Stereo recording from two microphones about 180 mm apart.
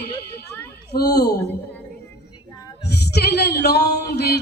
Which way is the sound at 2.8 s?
65° left (ahead or behind).